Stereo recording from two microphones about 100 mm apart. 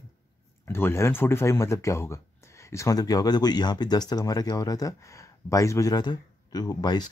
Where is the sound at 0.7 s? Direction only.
25° left (ahead or behind).